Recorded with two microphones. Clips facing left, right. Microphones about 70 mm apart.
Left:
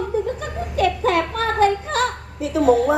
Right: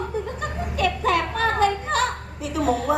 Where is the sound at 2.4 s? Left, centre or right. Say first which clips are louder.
Left 7 dB; left.